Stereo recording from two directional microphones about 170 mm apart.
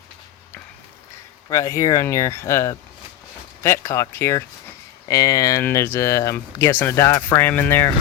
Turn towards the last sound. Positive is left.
turn(degrees=10)  # may be behind; listen again after turning